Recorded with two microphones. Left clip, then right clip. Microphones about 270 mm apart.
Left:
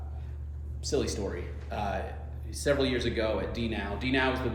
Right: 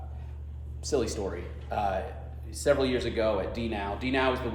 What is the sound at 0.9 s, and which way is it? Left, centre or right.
A man's voice, centre.